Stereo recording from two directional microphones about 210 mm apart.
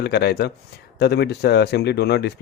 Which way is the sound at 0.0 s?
50° left (ahead or behind).